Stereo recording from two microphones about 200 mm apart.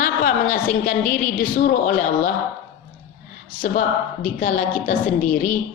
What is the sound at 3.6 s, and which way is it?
A woman's voice, 45° left (ahead or behind).